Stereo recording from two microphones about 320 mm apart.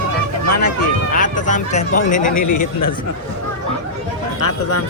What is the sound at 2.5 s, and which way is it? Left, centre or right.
Speech, left.